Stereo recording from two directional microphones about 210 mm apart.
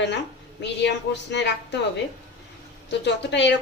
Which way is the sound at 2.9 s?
55° left (ahead or behind).